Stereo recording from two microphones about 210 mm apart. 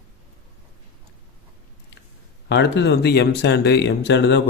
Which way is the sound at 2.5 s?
55° left (ahead or behind).